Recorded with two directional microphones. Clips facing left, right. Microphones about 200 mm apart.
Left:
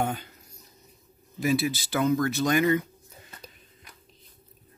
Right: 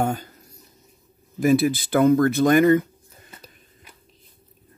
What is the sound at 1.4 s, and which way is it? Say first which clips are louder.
Speech: right 7 dB; 50° right (ahead or behind).